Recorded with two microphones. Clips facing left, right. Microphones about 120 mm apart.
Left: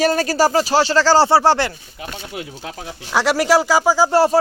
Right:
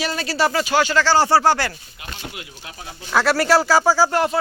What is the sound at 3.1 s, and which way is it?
Speech, 15° left (ahead or behind).